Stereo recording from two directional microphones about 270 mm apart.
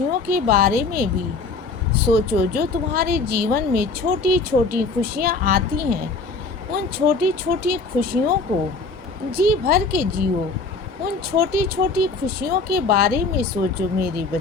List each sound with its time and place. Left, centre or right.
0.3 s speech: right
9.3 s speech: right
11.3 s speech: right